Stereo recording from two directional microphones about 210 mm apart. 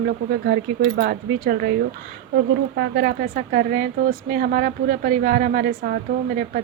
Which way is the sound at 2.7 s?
55° right (ahead or behind).